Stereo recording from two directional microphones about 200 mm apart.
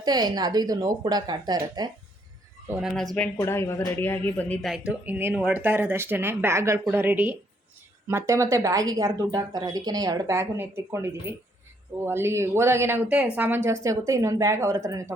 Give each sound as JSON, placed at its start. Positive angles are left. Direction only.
{"t": 0.0, "sound": "speech", "side_deg": -20}
{"t": 2.6, "sound": "speech", "side_deg": -10}
{"t": 3.2, "sound": "speech", "side_deg": 10}